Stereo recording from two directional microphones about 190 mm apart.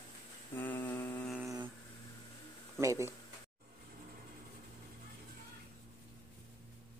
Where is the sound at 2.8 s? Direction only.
15° right (ahead or behind).